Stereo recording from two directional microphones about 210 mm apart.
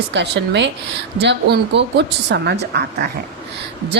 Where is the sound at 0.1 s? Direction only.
55° right (ahead or behind).